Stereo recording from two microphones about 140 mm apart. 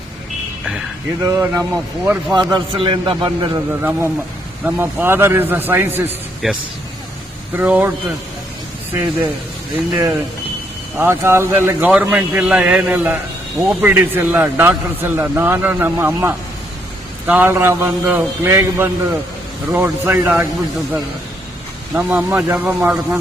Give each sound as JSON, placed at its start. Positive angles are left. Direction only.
{"t": 1.2, "sound": "speech", "side_deg": -20}
{"t": 3.7, "sound": "speech", "side_deg": -15}
{"t": 6.4, "sound": "speech", "side_deg": -5}
{"t": 10.9, "sound": "speech", "side_deg": -15}
{"t": 21.9, "sound": "speech", "side_deg": -10}